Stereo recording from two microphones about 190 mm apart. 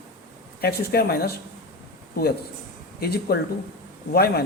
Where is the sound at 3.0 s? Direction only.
55° left (ahead or behind).